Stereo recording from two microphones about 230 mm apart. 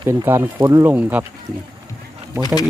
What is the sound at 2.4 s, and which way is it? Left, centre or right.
Speech, centre.